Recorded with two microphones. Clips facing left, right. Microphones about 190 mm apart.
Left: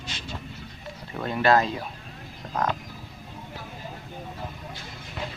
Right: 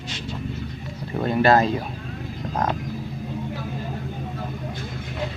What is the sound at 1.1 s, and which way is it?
Speech, 35° right (ahead or behind).